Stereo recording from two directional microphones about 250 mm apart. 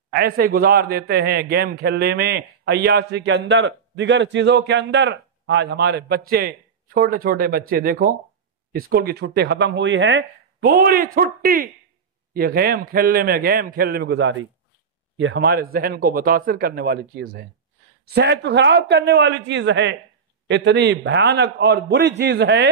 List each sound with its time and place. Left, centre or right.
0.1 s a man's voice: right